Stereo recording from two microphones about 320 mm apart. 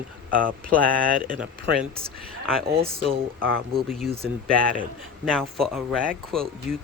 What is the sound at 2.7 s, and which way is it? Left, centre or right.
Speech, centre.